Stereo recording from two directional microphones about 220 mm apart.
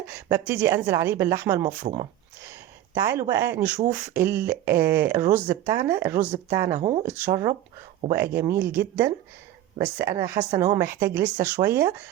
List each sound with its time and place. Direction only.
0.0 s a woman's voice: 10° right (ahead or behind)
6.7 s a woman's voice: 25° right (ahead or behind)